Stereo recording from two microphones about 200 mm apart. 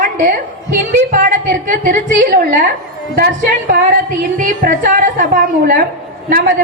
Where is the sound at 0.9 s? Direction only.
40° right (ahead or behind).